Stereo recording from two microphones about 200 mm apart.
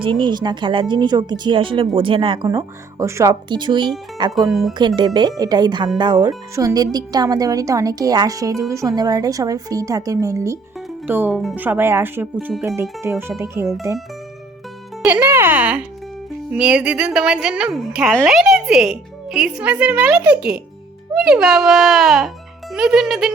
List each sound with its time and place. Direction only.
0.0 s a woman's voice: 25° right (ahead or behind)
15.0 s a woman's voice: 10° right (ahead or behind)